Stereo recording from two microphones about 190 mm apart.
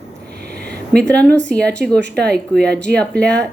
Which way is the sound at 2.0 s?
60° right (ahead or behind).